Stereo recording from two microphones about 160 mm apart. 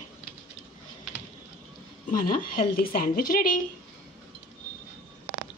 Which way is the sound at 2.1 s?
60° left (ahead or behind).